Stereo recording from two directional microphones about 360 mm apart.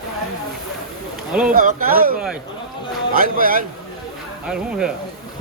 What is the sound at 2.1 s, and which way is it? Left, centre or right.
Speech, centre.